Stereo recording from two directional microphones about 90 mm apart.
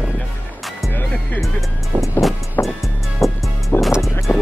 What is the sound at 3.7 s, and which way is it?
Music, 30° left (ahead or behind).